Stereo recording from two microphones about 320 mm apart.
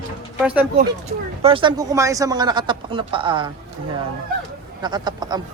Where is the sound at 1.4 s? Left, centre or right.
Centre.